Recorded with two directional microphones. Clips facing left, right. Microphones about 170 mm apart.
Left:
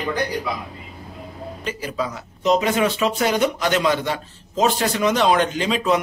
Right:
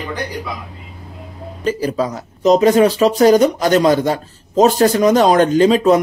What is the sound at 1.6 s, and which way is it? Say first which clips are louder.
Speech: right 9 dB; 40° right (ahead or behind).